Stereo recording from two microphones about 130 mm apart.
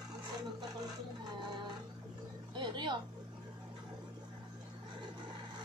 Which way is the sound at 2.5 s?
35° right (ahead or behind).